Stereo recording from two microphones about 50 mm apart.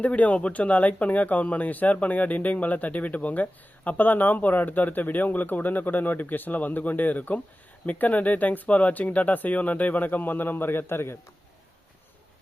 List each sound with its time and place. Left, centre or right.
0.0 s speech: left